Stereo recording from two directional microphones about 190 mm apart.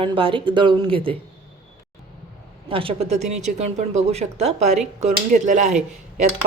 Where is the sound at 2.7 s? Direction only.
30° right (ahead or behind).